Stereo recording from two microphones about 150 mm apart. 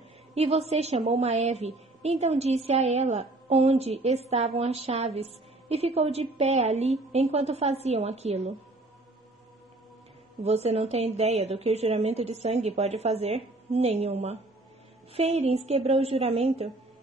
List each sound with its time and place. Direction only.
0.3 s a woman's voice: 45° right (ahead or behind)
10.4 s a woman's voice: 45° right (ahead or behind)